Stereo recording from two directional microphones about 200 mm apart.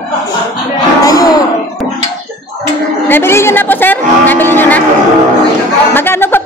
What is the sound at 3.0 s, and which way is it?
A woman's voice, 10° left (ahead or behind).